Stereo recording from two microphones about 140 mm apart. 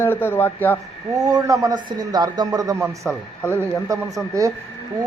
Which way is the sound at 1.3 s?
25° right (ahead or behind).